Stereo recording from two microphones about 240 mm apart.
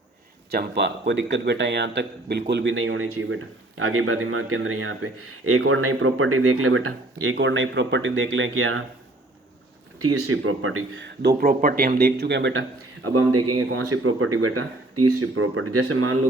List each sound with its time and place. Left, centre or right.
0.5 s a man's voice: right
10.0 s speech: right
13.0 s a man's voice: right